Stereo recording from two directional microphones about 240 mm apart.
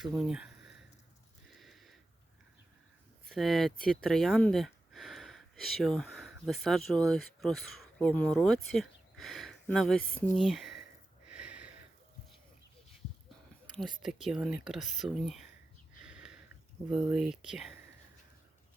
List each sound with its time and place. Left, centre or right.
0.0 s speech: centre
1.5 s a sound: centre
3.2 s speech: centre
11.3 s a sound: centre
13.7 s speech: centre
16.0 s sniff: centre
16.9 s speech: centre